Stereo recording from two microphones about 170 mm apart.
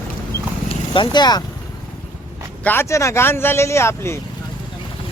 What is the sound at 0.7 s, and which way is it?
Speech, 25° left (ahead or behind).